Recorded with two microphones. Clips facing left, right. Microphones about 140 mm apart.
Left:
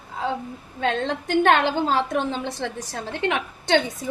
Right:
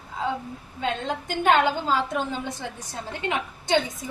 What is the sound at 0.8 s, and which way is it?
A woman's voice, 70° left (ahead or behind).